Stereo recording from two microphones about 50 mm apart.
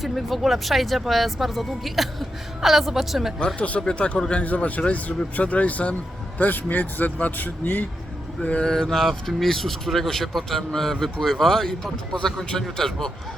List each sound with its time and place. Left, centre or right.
0.0 s speech: centre
3.4 s speech: left
8.6 s speech: centre